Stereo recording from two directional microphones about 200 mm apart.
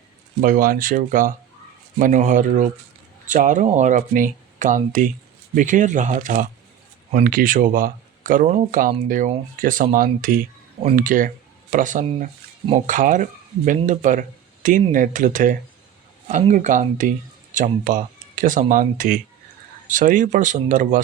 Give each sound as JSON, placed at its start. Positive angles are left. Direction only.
{"t": 0.4, "sound": "speech", "side_deg": -45}